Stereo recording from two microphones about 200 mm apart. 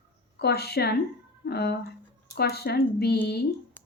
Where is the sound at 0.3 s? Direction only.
55° left (ahead or behind).